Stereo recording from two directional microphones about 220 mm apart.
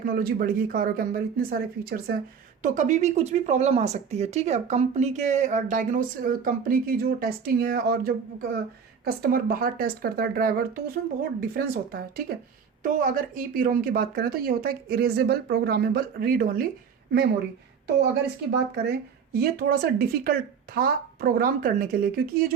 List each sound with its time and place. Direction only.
0.0 s a woman's voice: 40° right (ahead or behind)
18.8 s a woman's voice: 45° right (ahead or behind)